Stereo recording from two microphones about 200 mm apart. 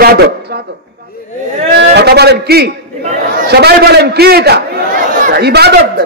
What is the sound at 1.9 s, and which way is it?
A man's voice, 55° right (ahead or behind).